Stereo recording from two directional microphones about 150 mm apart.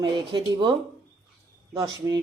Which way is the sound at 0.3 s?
35° right (ahead or behind).